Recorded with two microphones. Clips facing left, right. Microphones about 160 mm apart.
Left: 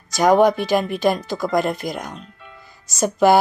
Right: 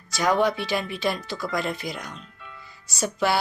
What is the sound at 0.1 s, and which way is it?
Speech, 45° left (ahead or behind).